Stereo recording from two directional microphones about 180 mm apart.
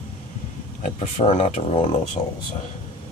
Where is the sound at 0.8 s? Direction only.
40° left (ahead or behind).